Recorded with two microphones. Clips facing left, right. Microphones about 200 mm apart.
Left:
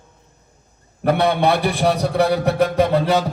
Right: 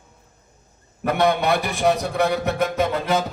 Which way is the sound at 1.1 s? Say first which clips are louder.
Left 3 dB; 30° left (ahead or behind).